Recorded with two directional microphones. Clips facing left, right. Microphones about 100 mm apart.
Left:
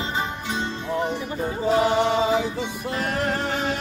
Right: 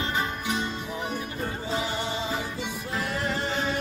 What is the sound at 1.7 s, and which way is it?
Music, 60° left (ahead or behind).